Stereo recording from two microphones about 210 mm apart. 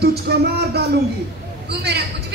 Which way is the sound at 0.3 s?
50° right (ahead or behind).